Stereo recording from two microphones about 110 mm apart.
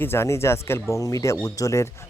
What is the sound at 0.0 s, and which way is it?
Speech, 25° left (ahead or behind).